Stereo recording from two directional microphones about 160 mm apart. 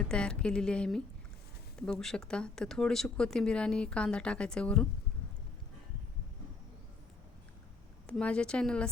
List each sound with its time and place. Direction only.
0.0 s speech: 5° left (ahead or behind)
8.0 s speech: 5° left (ahead or behind)